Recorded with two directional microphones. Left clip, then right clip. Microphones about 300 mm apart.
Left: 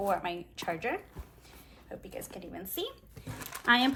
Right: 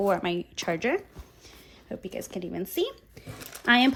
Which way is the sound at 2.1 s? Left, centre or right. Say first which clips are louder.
Right 8 dB; right.